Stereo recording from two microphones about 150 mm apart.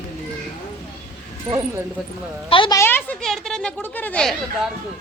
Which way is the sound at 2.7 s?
15° left (ahead or behind).